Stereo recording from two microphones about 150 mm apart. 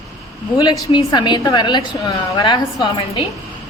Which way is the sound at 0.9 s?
30° left (ahead or behind).